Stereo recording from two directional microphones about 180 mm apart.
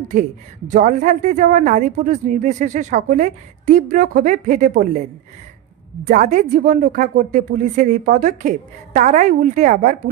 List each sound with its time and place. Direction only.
0.7 s speech: 45° right (ahead or behind)
6.0 s speech: 45° right (ahead or behind)